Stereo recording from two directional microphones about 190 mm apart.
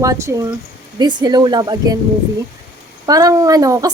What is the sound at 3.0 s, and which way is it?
Speech, 20° right (ahead or behind).